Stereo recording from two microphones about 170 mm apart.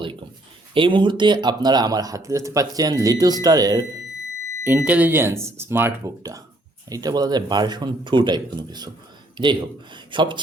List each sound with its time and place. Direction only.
0.7 s speech: 30° right (ahead or behind)
4.6 s speech: 10° right (ahead or behind); by 10.4 s 30° right (ahead or behind)